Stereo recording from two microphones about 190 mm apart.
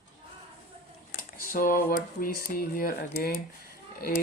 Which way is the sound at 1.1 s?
50° left (ahead or behind).